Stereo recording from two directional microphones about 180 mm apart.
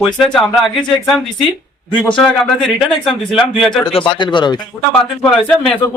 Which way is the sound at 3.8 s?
25° left (ahead or behind).